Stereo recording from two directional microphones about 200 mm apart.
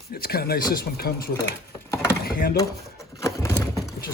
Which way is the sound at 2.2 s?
50° left (ahead or behind).